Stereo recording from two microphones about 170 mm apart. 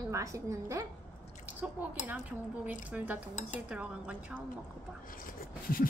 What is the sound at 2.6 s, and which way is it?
Speech, 10° right (ahead or behind).